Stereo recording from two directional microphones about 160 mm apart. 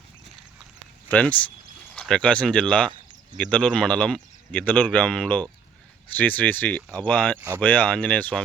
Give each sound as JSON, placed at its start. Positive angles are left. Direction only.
{"t": 1.0, "sound": "speech", "side_deg": 10}